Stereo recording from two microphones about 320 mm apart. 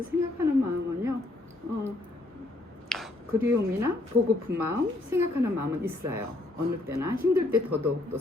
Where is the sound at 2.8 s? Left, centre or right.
Centre.